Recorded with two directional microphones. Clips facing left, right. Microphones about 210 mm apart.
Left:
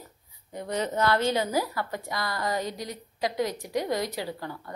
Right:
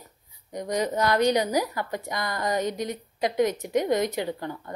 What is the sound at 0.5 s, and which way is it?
Speech, 15° right (ahead or behind).